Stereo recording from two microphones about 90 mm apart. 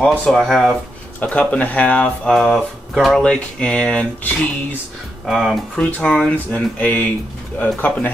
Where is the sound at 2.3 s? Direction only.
Centre (ahead or behind).